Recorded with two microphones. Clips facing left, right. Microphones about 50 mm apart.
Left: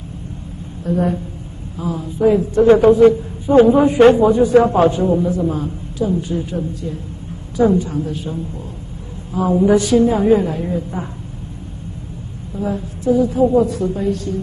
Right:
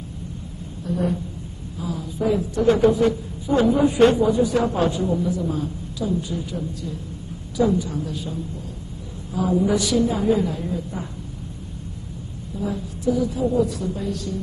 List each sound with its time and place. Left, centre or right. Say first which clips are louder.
0.8 s a woman's voice: left 6 dB; left
12.5 s a woman's voice: left 5 dB; left